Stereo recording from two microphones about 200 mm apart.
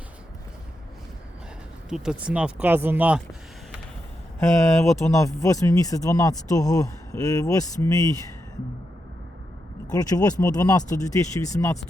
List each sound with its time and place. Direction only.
1.9 s speech: 5° right (ahead or behind)
4.4 s speech: 15° left (ahead or behind)
9.9 s speech: 20° left (ahead or behind)